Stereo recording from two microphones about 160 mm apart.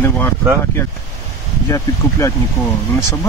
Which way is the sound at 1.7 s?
20° left (ahead or behind).